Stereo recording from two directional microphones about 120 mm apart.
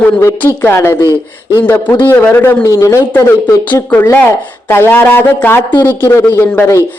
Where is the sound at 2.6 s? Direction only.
30° left (ahead or behind).